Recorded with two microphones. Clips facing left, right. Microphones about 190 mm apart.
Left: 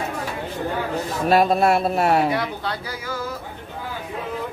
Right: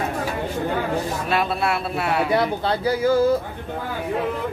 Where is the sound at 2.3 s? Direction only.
30° right (ahead or behind).